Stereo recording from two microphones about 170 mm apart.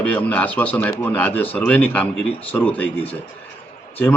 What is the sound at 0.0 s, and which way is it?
A man's voice, 10° left (ahead or behind).